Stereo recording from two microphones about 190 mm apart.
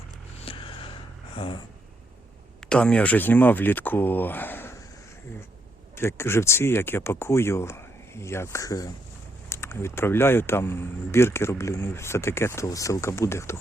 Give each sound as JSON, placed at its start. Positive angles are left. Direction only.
{"t": 0.3, "sound": "vehicle", "side_deg": 30}
{"t": 2.6, "sound": "speech", "side_deg": 5}
{"t": 6.0, "sound": "speech", "side_deg": 15}